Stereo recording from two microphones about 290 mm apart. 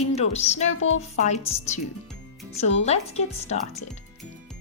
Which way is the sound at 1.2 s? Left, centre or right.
Left.